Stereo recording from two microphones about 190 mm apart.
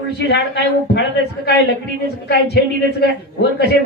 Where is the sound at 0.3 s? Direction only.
60° left (ahead or behind).